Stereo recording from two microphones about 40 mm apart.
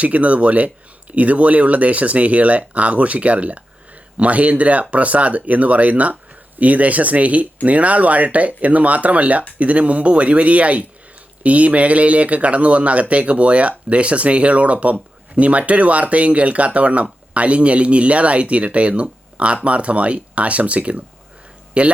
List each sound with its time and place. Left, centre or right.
0.0 s speech: right